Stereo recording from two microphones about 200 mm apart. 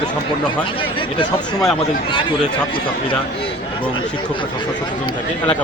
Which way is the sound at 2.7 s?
25° left (ahead or behind).